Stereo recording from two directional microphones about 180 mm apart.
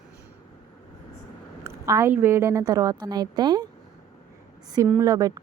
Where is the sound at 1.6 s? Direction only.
15° right (ahead or behind).